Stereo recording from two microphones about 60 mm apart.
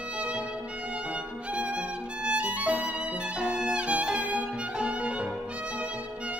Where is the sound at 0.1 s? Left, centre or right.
Centre.